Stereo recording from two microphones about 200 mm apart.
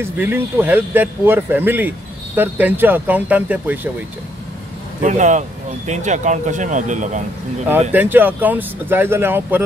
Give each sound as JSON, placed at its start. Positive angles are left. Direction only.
{"t": 0.0, "sound": "speech", "side_deg": -10}
{"t": 5.0, "sound": "speech", "side_deg": -35}
{"t": 7.9, "sound": "speech", "side_deg": -10}